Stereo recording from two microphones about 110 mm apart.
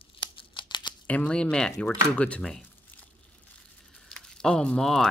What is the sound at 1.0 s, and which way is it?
Speech, 10° left (ahead or behind).